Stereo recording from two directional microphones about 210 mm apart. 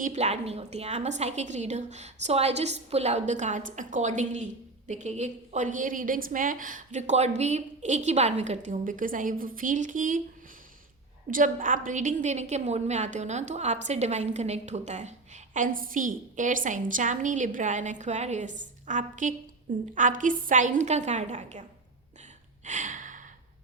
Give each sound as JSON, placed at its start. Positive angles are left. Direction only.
{"t": 0.0, "sound": "a woman's voice", "side_deg": -35}
{"t": 11.3, "sound": "a woman's voice", "side_deg": -40}
{"t": 22.6, "sound": "sigh", "side_deg": -35}